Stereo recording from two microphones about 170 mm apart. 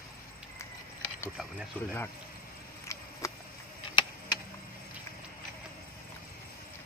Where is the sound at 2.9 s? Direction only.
15° left (ahead or behind).